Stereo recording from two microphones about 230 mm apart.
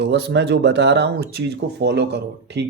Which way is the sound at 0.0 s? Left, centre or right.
Right.